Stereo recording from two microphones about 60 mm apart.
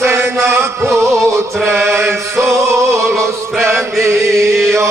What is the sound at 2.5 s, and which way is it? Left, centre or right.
Music, right.